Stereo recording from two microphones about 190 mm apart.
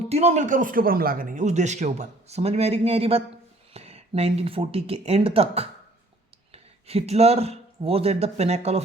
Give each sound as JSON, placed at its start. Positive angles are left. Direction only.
{"t": 0.1, "sound": "a man's voice", "side_deg": -35}